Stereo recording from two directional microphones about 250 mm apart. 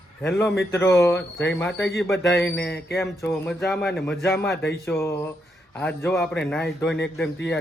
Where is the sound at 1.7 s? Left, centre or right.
Left.